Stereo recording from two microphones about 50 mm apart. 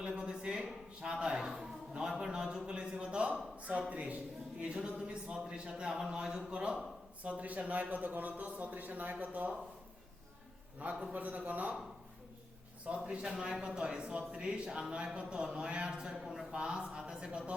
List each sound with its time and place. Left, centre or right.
0.0 s a sound: centre
2.6 s a man's voice: centre
11.1 s a man's voice: right
13.3 s speech: centre